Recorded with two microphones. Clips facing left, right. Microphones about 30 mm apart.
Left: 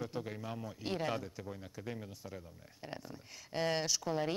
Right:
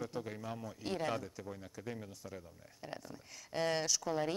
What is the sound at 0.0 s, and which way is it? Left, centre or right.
A man's voice, centre.